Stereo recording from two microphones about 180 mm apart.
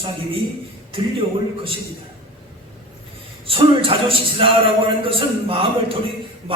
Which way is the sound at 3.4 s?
30° right (ahead or behind).